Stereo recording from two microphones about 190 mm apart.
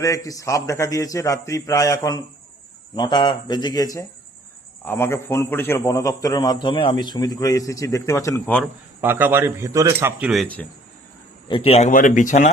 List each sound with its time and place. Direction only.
0.0 s a man's voice: 15° left (ahead or behind)
8.6 s speech: 10° right (ahead or behind)
11.4 s speech: 30° left (ahead or behind)